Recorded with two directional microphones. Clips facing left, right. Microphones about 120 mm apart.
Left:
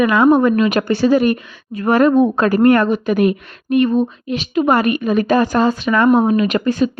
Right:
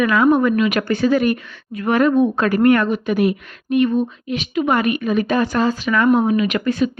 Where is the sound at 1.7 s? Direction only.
40° left (ahead or behind).